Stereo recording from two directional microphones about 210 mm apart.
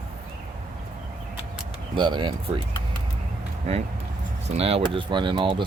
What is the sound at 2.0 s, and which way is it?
Speech, 20° right (ahead or behind).